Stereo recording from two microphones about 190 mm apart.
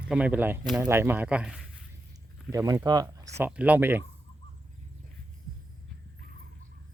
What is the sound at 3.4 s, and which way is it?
Speech, 5° right (ahead or behind).